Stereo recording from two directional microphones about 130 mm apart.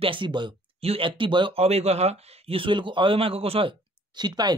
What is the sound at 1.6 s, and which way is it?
Speech, 55° right (ahead or behind).